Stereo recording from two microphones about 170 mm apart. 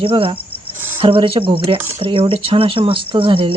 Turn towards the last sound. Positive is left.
turn(degrees=-30)  # may be behind; listen again after turning